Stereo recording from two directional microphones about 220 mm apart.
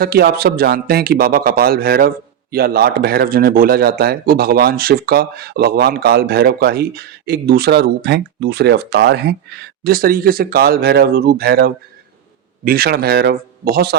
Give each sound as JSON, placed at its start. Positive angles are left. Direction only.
{"t": 0.0, "sound": "a man's voice", "side_deg": -45}